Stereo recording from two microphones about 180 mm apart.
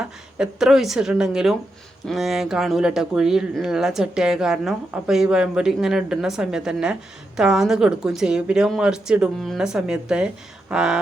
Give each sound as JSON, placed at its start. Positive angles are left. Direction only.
{"t": 0.0, "sound": "speech", "side_deg": -5}